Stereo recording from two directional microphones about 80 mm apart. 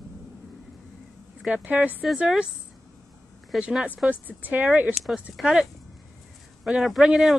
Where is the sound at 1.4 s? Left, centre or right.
Centre.